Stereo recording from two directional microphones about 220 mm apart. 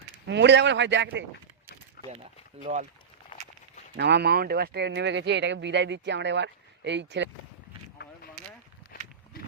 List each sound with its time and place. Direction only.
0.3 s speech: 50° right (ahead or behind)
2.0 s speech: 30° right (ahead or behind)
3.3 s walk: 20° left (ahead or behind)
3.9 s speech: 50° right (ahead or behind)